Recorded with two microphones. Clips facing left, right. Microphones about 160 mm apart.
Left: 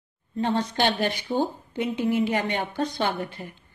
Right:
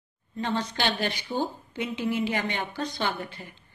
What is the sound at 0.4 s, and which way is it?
A woman's voice, 40° left (ahead or behind).